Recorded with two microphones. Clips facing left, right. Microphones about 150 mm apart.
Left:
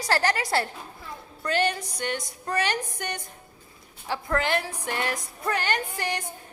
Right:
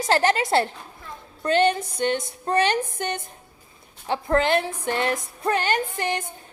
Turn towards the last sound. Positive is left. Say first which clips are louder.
# right 4 dB
turn(degrees=-25)  # may be behind; listen again after turning